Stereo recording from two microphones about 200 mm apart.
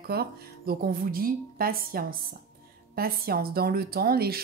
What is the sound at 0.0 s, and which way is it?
A woman's voice, 50° right (ahead or behind).